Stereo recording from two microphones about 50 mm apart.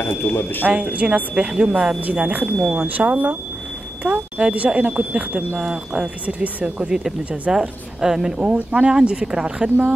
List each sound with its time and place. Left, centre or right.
0.1 s speech: left
0.7 s a woman's voice: right
8.4 s speech: right